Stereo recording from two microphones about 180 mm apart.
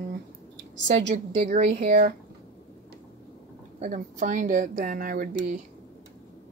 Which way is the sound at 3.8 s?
45° right (ahead or behind).